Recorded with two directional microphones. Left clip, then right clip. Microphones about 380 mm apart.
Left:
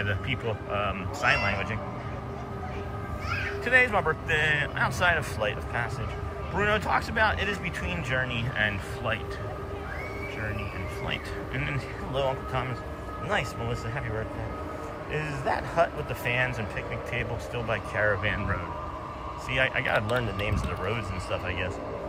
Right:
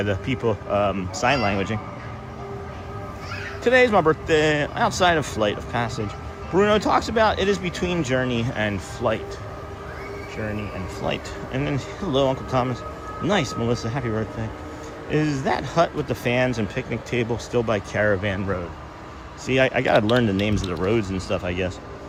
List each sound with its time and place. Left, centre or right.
0.0 s speech: centre
3.6 s speech: centre
11.0 s speech: centre
15.2 s speech: centre
17.7 s speech: centre
19.5 s speech: centre
21.4 s speech: centre